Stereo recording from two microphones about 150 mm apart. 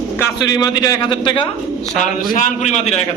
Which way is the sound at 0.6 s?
25° left (ahead or behind).